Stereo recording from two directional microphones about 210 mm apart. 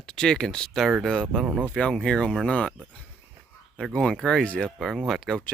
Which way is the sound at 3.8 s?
Centre (ahead or behind).